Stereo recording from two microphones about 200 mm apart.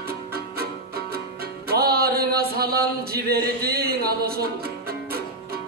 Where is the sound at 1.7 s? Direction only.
50° right (ahead or behind).